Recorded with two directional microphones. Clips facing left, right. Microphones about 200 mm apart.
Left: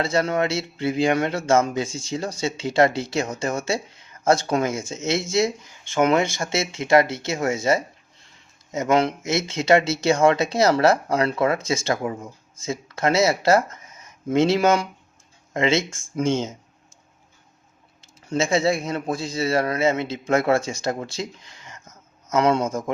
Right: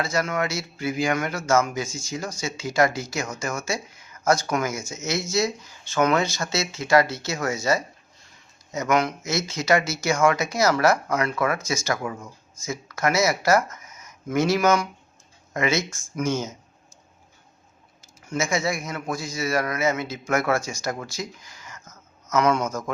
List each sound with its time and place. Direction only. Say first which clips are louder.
0.0 s speech: left 4 dB; 30° left (ahead or behind)
18.3 s speech: left 5 dB; 30° left (ahead or behind)